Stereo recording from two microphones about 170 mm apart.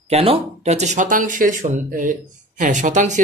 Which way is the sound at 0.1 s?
35° right (ahead or behind).